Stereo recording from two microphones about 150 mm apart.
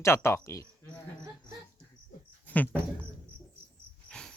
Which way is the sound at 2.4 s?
10° left (ahead or behind).